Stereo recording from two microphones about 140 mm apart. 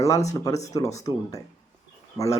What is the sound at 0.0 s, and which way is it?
Speech, 20° left (ahead or behind).